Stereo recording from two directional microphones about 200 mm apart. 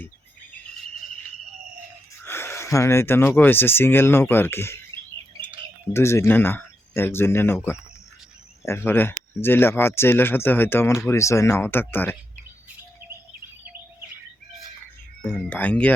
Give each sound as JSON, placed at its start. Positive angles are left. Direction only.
{"t": 2.2, "sound": "speech", "side_deg": 10}
{"t": 5.9, "sound": "speech", "side_deg": 15}
{"t": 15.2, "sound": "speech", "side_deg": 5}